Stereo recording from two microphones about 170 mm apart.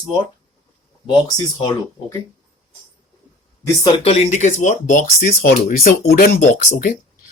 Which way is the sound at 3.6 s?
20° left (ahead or behind).